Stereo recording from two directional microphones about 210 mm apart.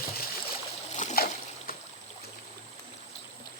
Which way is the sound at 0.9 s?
35° left (ahead or behind).